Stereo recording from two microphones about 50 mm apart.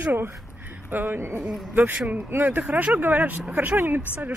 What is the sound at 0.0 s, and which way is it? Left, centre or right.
A woman's voice, right.